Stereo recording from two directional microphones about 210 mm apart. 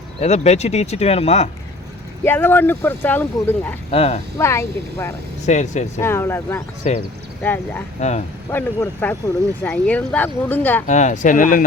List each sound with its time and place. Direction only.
0.2 s speech: 30° left (ahead or behind)
2.2 s speech: 10° left (ahead or behind)
3.9 s speech: 30° left (ahead or behind)
4.4 s speech: 15° left (ahead or behind)
5.5 s speech: 35° left (ahead or behind)
6.0 s speech: 10° left (ahead or behind)
6.8 s speech: 35° left (ahead or behind)
7.4 s speech: 10° left (ahead or behind)
7.9 s speech: 35° left (ahead or behind)
8.4 s speech: 10° left (ahead or behind)
10.8 s speech: 35° left (ahead or behind)